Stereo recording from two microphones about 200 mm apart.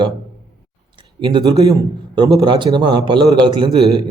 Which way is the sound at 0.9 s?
20° right (ahead or behind).